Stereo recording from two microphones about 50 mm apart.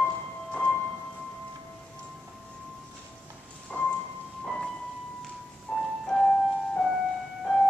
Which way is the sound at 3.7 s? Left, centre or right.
Centre.